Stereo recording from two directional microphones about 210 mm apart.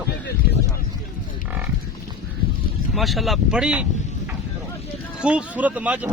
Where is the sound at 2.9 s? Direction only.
Centre (ahead or behind).